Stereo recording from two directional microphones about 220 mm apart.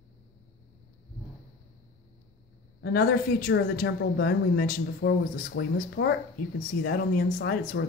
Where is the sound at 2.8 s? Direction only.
45° left (ahead or behind).